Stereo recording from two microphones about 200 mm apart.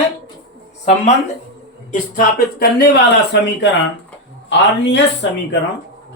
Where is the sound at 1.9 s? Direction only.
45° left (ahead or behind); by 5.0 s 60° left (ahead or behind).